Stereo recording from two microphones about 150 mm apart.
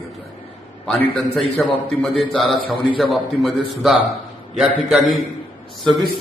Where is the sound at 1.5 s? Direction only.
Centre (ahead or behind).